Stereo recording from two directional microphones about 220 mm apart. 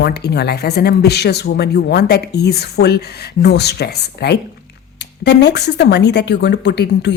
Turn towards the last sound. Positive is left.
turn(degrees=50)  # may be behind; listen again after turning